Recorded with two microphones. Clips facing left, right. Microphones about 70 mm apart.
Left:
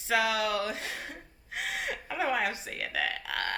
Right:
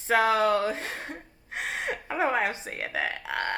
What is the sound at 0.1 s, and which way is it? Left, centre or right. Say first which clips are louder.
Speech: right 6 dB; right.